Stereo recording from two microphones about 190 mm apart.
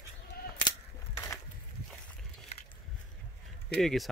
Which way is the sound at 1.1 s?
15° left (ahead or behind).